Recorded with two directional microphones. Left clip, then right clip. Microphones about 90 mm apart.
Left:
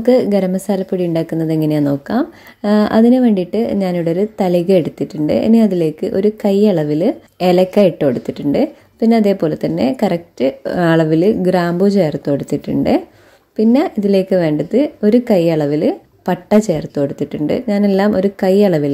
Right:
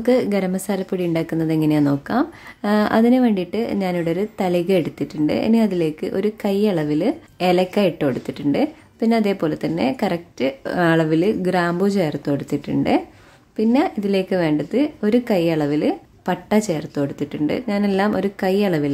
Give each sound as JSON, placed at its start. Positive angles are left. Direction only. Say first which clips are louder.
{"t": 0.0, "sound": "a woman's voice", "louder": "left 6 dB", "side_deg": 15}